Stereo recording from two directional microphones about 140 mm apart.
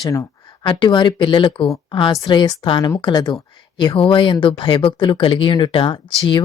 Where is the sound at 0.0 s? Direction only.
20° left (ahead or behind).